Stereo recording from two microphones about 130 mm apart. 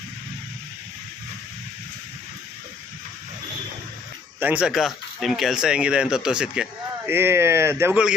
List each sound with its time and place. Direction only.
4.4 s speech: 10° right (ahead or behind)
7.1 s speech: 15° right (ahead or behind)